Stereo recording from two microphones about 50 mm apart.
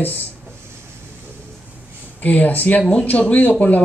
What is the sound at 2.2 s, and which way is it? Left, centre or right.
Speech, left.